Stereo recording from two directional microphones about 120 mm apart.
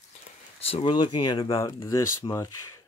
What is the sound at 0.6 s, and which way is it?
Speech, 55° left (ahead or behind).